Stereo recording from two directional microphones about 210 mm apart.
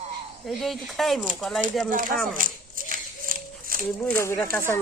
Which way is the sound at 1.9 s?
40° right (ahead or behind).